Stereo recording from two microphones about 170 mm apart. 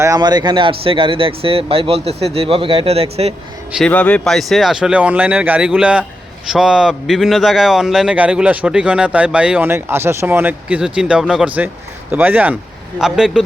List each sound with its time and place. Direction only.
0.0 s speech: 20° right (ahead or behind); by 3.3 s 35° right (ahead or behind)
3.8 s a man's voice: 5° left (ahead or behind)